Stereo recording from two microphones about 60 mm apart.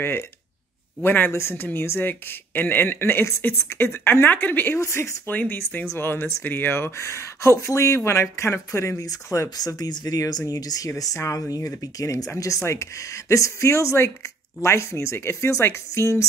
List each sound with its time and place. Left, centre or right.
1.0 s speech: left
4.7 s speech: left
5.3 s speech: left
5.9 s speech: left
12.6 s speech: left